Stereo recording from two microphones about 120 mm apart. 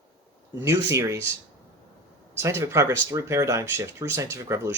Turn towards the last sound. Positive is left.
turn(degrees=-25)  # may be behind; listen again after turning